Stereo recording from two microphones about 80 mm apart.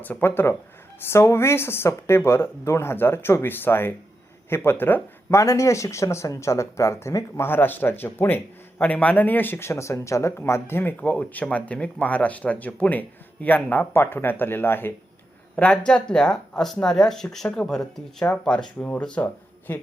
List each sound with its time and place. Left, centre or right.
0.0 s speech: left
5.3 s speech: left
7.4 s speech: left
15.5 s speech: centre